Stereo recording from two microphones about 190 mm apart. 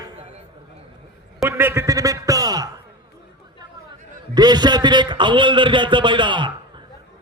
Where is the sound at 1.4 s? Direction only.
10° right (ahead or behind).